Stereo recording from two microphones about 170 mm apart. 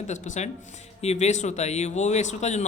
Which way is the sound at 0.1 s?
45° left (ahead or behind).